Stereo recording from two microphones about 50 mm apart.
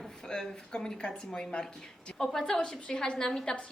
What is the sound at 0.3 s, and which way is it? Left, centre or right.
Speech, centre.